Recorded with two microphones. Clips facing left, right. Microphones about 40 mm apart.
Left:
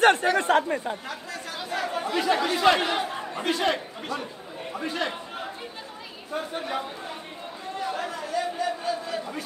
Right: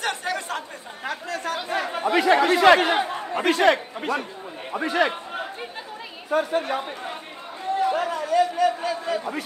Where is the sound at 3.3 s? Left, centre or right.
Right.